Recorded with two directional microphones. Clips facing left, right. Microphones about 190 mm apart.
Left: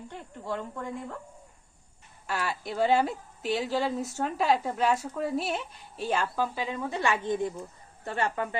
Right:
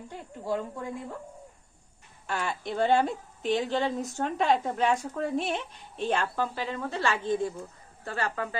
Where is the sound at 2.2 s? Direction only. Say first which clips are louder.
Even; 5° left (ahead or behind).